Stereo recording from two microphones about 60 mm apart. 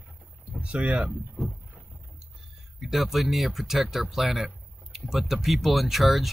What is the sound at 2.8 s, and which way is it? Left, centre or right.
Speech, centre.